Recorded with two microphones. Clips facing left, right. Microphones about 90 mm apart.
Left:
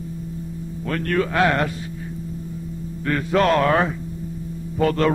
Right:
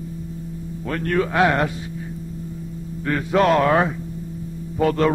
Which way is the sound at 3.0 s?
10° right (ahead or behind).